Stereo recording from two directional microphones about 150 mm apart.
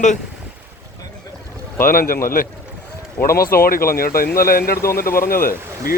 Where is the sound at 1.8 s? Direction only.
75° left (ahead or behind).